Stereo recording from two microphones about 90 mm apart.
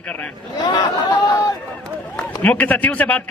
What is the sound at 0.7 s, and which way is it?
Speech, 50° left (ahead or behind).